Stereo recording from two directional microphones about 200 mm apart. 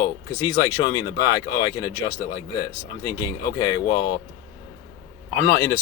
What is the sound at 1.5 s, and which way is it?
Speech, 20° left (ahead or behind).